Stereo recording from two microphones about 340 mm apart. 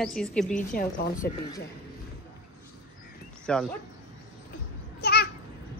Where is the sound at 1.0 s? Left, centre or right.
Left.